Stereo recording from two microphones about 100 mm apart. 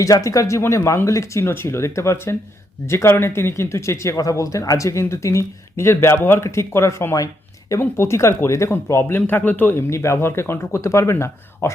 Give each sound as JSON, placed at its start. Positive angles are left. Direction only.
{"t": 0.0, "sound": "speech", "side_deg": 35}